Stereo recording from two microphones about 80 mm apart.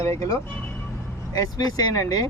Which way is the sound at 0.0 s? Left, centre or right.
Left.